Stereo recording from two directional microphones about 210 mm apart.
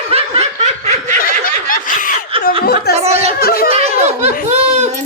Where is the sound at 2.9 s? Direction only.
30° right (ahead or behind).